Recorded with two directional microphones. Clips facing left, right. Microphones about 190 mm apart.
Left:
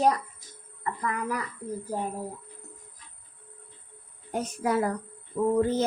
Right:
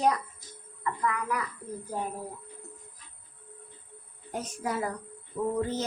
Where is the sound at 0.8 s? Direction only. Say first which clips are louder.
Even; 35° left (ahead or behind).